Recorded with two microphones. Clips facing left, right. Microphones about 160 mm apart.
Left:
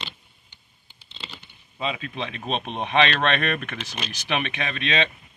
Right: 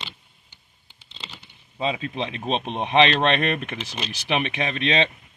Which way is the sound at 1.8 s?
30° right (ahead or behind).